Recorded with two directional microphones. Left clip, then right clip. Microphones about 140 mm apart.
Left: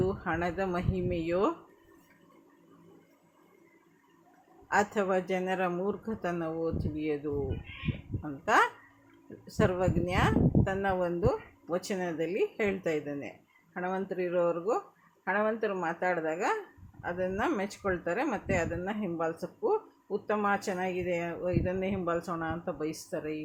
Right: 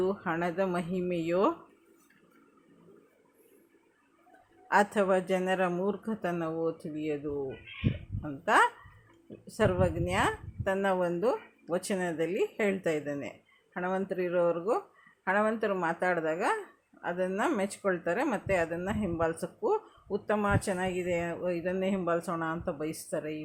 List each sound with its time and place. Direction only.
0.0 s speech: 15° right (ahead or behind)
4.7 s speech: 20° right (ahead or behind)
8.2 s speech: 10° right (ahead or behind)